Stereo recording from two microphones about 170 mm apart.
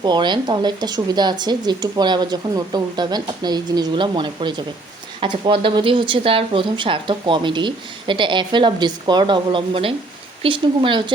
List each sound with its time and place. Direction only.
0.0 s speech: 25° right (ahead or behind)